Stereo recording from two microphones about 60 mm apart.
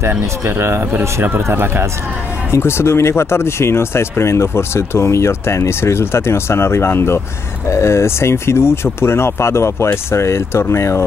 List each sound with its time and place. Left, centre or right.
0.2 s speech: right
2.5 s speech: left